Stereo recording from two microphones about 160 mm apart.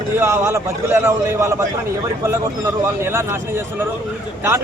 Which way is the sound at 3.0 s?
15° right (ahead or behind).